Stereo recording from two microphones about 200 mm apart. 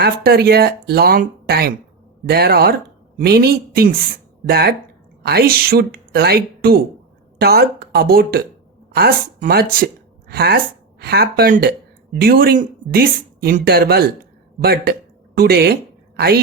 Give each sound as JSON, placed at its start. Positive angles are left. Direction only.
{"t": 0.0, "sound": "speech", "side_deg": -50}